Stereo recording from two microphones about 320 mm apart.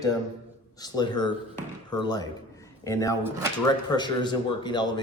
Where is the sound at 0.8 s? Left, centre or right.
Centre.